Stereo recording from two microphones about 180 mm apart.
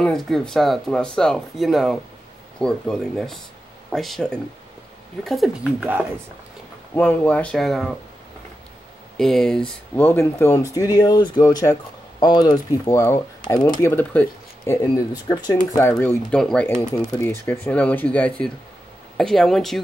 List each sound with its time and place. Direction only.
0.0 s speech: centre (ahead or behind)
7.0 s speech: 10° left (ahead or behind)
9.1 s speech: centre (ahead or behind); by 13.8 s 20° left (ahead or behind)
13.8 s speech: 10° left (ahead or behind)
15.9 s speech: 10° left (ahead or behind)